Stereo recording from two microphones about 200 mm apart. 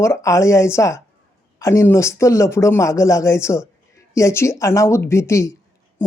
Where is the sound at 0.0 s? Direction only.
15° left (ahead or behind).